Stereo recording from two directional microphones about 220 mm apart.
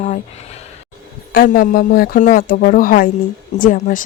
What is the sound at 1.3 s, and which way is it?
A woman's voice, 40° left (ahead or behind).